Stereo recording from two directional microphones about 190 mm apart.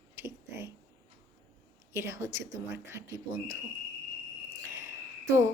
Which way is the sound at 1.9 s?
15° right (ahead or behind).